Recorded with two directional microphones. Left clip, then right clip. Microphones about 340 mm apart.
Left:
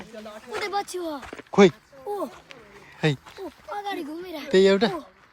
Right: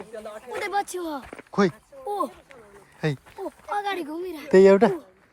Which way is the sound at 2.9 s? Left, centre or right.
Centre.